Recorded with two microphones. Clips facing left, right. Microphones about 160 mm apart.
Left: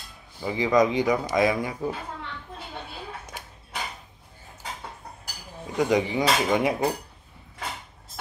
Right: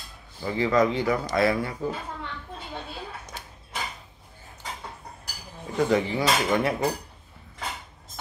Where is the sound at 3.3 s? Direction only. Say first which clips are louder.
Even; 15° left (ahead or behind).